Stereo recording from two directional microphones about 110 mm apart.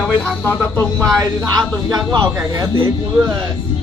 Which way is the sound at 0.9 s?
5° left (ahead or behind).